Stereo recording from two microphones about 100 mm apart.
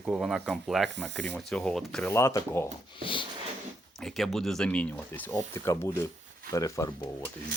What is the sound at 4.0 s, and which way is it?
Speech, centre (ahead or behind).